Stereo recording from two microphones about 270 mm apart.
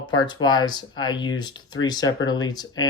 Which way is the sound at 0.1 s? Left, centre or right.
Centre.